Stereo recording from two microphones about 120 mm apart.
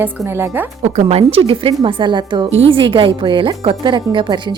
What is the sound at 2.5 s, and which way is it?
Speech, 55° right (ahead or behind).